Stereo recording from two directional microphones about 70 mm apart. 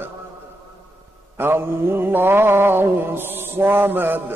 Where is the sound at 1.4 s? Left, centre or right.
Right.